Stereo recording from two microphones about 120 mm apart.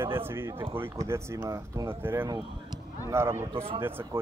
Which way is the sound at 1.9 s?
20° right (ahead or behind).